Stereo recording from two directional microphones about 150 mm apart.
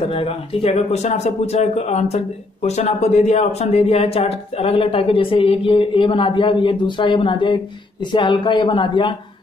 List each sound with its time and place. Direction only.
0.0 s speech: 40° left (ahead or behind)